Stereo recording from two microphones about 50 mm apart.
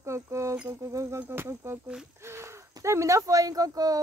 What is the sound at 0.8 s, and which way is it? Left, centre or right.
Speech, right.